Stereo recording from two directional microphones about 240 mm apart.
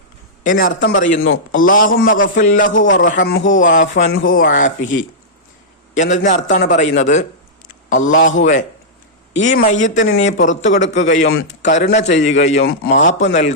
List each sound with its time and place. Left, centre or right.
0.4 s a man's voice: left
6.2 s a man's voice: left
8.1 s a man's voice: left
8.4 s a man's voice: left
12.5 s a man's voice: left
13.1 s a man's voice: left